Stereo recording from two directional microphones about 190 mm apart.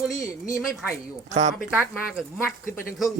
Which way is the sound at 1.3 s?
40° right (ahead or behind).